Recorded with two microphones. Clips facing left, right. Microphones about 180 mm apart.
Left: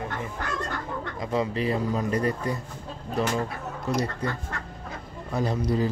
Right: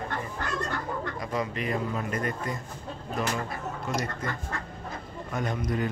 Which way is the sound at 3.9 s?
35° left (ahead or behind).